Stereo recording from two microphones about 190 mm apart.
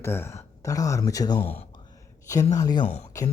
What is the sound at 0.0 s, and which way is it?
Speech, 10° left (ahead or behind).